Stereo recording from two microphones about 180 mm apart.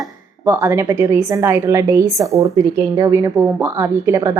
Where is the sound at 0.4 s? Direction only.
15° right (ahead or behind).